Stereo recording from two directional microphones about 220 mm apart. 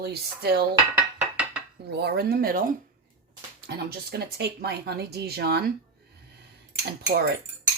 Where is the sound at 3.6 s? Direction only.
45° right (ahead or behind).